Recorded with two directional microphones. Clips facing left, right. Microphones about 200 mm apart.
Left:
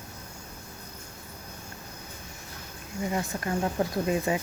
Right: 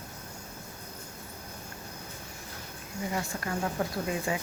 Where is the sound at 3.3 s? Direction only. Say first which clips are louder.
Left 5 dB; 20° left (ahead or behind).